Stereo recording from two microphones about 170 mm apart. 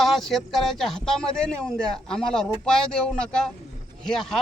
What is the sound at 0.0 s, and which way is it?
Speech, centre (ahead or behind).